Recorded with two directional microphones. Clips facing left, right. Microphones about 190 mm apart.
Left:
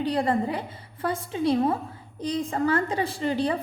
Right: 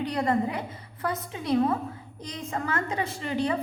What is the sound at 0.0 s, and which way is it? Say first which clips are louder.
A woman's voice: left 2 dB; 30° left (ahead or behind).